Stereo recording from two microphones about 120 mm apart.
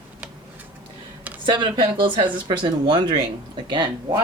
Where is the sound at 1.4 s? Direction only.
40° right (ahead or behind).